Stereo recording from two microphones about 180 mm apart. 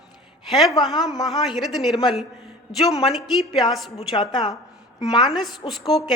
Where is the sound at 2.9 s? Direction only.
20° left (ahead or behind).